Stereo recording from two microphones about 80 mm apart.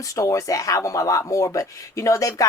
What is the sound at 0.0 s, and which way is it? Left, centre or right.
Speech, left.